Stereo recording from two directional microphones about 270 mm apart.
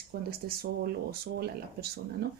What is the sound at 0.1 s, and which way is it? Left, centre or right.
Speech, right.